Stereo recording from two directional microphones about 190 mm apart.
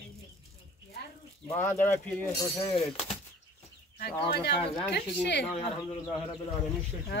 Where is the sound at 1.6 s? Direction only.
10° left (ahead or behind).